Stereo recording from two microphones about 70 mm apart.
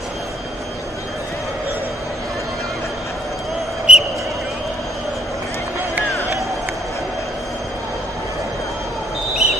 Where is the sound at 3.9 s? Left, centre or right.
Centre.